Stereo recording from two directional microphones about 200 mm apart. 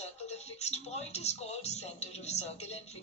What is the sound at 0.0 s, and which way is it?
Speech, 30° left (ahead or behind).